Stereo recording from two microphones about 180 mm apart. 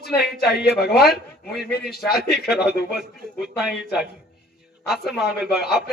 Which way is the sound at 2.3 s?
60° left (ahead or behind).